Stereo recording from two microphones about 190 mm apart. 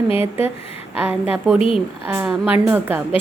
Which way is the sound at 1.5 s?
30° left (ahead or behind).